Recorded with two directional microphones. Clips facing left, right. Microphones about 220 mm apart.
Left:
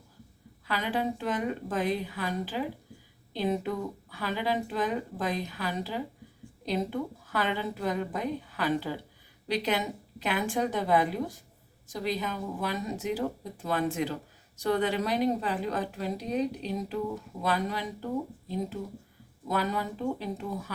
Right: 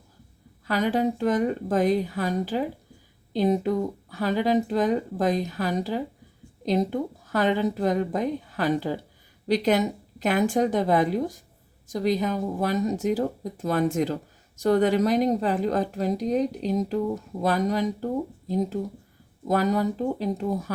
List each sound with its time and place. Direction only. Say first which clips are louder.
0.7 s speech: right 7 dB; 45° right (ahead or behind)
19.5 s speech: right 7 dB; 45° right (ahead or behind)